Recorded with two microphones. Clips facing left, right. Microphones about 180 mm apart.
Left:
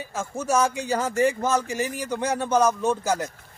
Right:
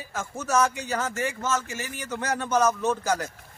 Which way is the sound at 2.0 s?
10° left (ahead or behind).